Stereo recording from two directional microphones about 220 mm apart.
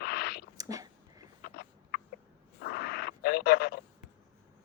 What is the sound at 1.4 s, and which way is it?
Fowl, 45° left (ahead or behind).